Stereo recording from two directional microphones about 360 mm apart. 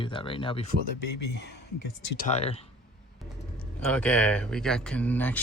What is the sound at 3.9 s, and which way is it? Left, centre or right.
Speech, centre.